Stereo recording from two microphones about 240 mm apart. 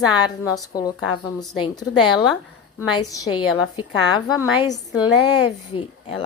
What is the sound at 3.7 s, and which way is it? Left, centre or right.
Speech, centre.